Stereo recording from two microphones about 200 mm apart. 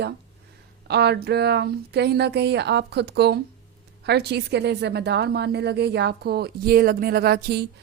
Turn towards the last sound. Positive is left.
turn(degrees=-55)  # may be behind; listen again after turning